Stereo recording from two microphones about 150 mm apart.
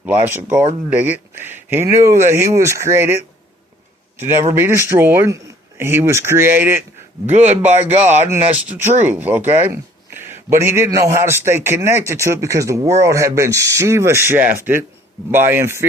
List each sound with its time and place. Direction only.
0.3 s a man's voice: 15° right (ahead or behind)
4.2 s a man's voice: 15° right (ahead or behind)